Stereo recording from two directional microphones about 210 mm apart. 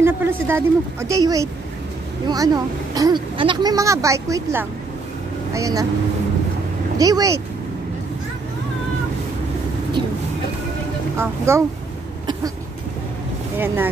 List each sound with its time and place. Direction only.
0.0 s speech: 10° right (ahead or behind)
7.0 s speech: 15° right (ahead or behind)
11.1 s speech: 10° right (ahead or behind)